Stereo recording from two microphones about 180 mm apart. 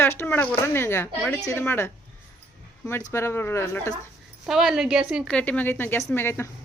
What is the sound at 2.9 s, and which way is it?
Speech, 15° left (ahead or behind).